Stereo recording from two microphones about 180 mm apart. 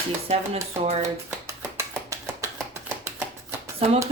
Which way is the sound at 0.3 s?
35° right (ahead or behind).